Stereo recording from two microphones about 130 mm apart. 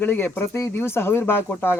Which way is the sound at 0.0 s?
15° left (ahead or behind).